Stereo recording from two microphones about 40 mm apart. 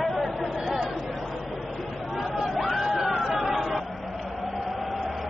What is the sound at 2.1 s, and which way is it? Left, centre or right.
Chatter, centre.